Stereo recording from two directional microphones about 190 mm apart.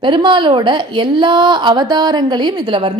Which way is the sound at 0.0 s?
25° right (ahead or behind).